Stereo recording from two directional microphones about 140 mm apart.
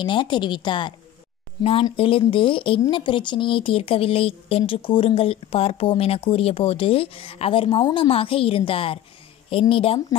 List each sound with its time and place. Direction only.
0.0 s speech: 35° left (ahead or behind)